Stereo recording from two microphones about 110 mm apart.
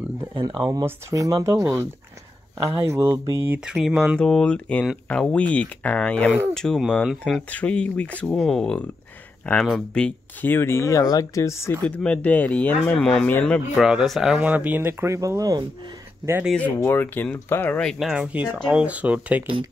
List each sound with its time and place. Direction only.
0.8 s speech: 30° right (ahead or behind)
3.7 s speech: 5° right (ahead or behind)
4.2 s speech: 10° left (ahead or behind)
10.4 s speech: 20° left (ahead or behind)
11.8 s speech: 10° left (ahead or behind)
13.7 s speech: 5° right (ahead or behind); by 15.6 s 30° right (ahead or behind)
16.5 s speech: 15° left (ahead or behind)
17.9 s speech: 5° right (ahead or behind)